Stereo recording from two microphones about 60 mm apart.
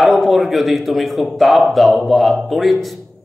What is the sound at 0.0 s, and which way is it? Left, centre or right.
A man's voice, centre.